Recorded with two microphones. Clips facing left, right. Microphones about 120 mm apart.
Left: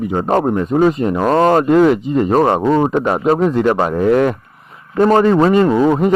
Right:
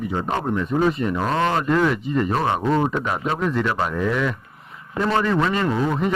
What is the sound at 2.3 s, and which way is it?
Speech, 45° left (ahead or behind).